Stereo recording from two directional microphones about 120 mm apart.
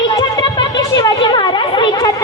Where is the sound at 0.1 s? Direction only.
40° left (ahead or behind).